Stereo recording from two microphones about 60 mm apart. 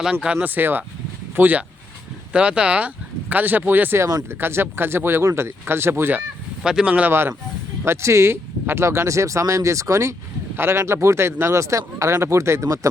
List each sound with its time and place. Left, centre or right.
0.0 s speech: centre
0.4 s speech: right
5.2 s speech: right
6.7 s speech: centre
7.1 s speech: right
10.6 s speech: right
12.6 s speech: right